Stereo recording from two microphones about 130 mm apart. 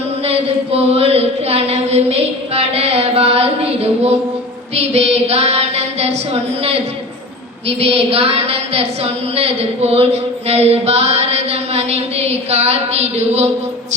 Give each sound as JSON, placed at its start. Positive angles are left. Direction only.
{"t": 0.3, "sound": "a woman's voice", "side_deg": -50}
{"t": 7.8, "sound": "a woman's voice", "side_deg": -50}